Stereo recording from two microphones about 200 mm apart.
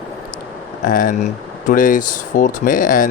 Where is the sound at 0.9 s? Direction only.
40° left (ahead or behind).